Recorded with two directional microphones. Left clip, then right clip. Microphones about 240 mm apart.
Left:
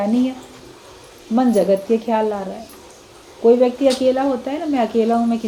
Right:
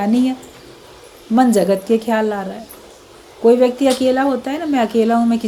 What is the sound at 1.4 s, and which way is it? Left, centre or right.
A woman's voice, right.